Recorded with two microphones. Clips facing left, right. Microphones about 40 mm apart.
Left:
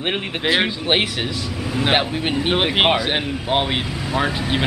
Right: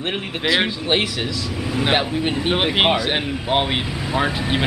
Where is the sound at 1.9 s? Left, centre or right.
Centre.